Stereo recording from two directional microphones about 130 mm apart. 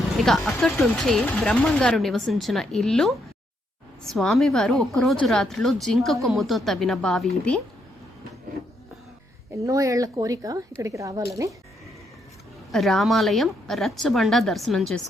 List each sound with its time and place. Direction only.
0.2 s speech: centre (ahead or behind)
9.6 s speech: 25° right (ahead or behind)
12.7 s speech: centre (ahead or behind)